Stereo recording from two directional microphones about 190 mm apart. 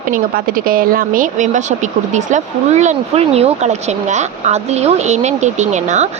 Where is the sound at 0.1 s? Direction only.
50° right (ahead or behind).